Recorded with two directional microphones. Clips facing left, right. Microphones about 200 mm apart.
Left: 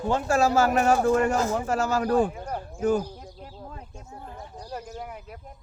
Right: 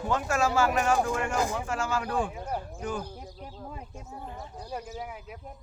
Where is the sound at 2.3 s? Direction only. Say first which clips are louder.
Left 1 dB; 5° right (ahead or behind).